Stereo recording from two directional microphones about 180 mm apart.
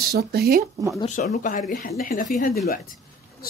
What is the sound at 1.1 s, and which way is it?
Speech, 45° left (ahead or behind).